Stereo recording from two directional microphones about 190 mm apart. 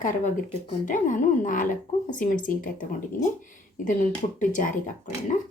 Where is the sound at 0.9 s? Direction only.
45° left (ahead or behind).